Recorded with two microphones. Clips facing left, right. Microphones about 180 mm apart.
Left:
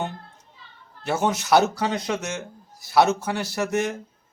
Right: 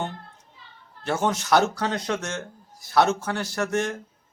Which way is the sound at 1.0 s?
5° left (ahead or behind).